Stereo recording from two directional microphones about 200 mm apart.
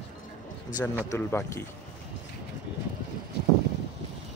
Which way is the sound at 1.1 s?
10° left (ahead or behind).